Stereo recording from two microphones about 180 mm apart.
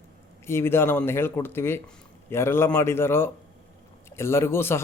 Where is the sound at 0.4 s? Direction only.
15° left (ahead or behind).